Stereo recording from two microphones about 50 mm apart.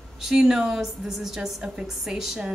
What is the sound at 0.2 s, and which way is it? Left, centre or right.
A woman's voice, centre.